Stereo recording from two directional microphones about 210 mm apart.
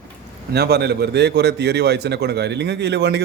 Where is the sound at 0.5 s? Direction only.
50° right (ahead or behind).